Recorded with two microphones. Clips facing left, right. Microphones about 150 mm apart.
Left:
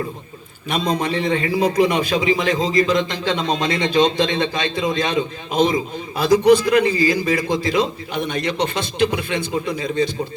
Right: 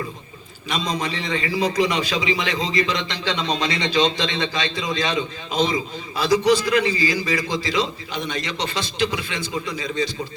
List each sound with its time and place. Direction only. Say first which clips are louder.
0.7 s a man's voice: left 5 dB; 55° left (ahead or behind)